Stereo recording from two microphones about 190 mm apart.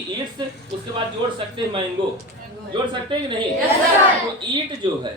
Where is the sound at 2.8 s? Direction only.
25° right (ahead or behind).